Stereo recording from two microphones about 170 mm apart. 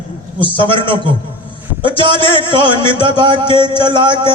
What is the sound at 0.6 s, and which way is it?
Music, 30° right (ahead or behind).